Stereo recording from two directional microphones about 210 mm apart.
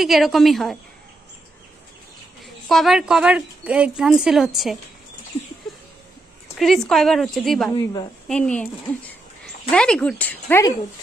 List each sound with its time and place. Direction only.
0.0 s a woman's voice: centre (ahead or behind)
2.4 s a woman's voice: centre (ahead or behind)
6.6 s a woman's voice: centre (ahead or behind)
7.7 s a woman's voice: 20° left (ahead or behind)
8.3 s a woman's voice: 5° left (ahead or behind)
9.7 s speech: 5° left (ahead or behind)